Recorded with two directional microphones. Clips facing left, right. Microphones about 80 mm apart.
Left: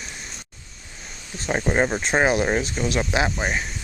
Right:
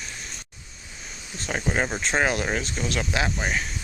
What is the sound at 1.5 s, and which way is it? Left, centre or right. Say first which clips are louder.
Speech: left 4 dB; centre.